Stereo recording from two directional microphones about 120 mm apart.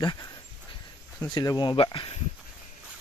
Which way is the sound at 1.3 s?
35° left (ahead or behind).